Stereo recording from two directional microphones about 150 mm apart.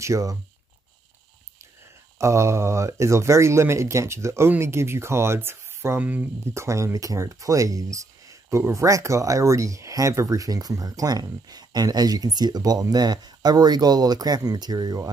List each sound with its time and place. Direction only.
0.0 s speech: 20° right (ahead or behind)
2.1 s speech: 20° right (ahead or behind)